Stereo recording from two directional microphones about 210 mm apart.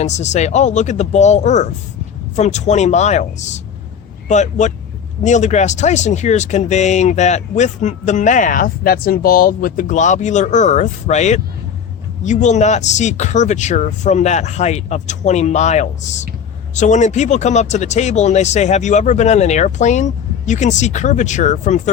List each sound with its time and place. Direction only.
0.0 s speech: 35° left (ahead or behind)